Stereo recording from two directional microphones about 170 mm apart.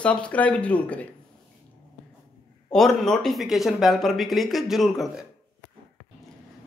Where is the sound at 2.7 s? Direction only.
Centre (ahead or behind).